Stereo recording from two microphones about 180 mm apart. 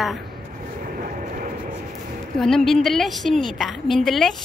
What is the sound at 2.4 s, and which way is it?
A woman's voice, centre (ahead or behind).